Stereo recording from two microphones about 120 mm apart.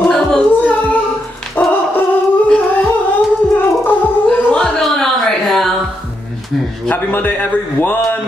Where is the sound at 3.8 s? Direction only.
10° left (ahead or behind).